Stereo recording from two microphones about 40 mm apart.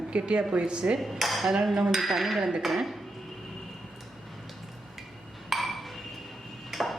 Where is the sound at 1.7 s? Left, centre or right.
Centre.